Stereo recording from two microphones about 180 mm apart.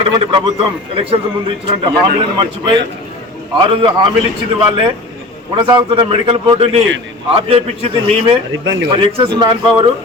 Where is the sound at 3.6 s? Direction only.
25° right (ahead or behind).